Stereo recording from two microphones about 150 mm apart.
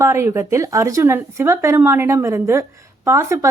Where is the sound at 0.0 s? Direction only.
20° right (ahead or behind).